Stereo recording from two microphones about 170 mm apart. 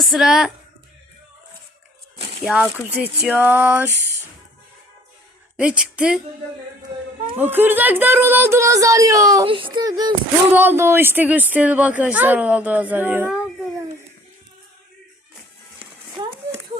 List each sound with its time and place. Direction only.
0.0 s speech: centre (ahead or behind)
2.6 s a woman's voice: 10° right (ahead or behind)
5.5 s a woman's voice: 5° right (ahead or behind)
7.3 s a woman's voice: 10° right (ahead or behind)
9.5 s speech: 30° right (ahead or behind)
10.5 s a woman's voice: 10° right (ahead or behind)
16.2 s a sound: 30° right (ahead or behind)